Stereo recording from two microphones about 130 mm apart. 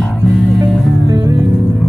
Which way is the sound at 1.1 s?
30° right (ahead or behind).